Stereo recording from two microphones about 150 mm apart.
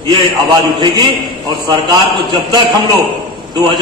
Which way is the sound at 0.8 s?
35° right (ahead or behind).